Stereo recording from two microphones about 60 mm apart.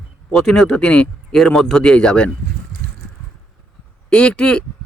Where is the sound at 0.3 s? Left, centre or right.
Centre.